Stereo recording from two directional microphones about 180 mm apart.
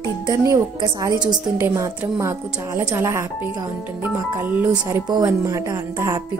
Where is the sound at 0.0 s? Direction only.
20° right (ahead or behind).